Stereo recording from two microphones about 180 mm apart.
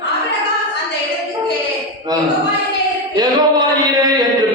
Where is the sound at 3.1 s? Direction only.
20° right (ahead or behind).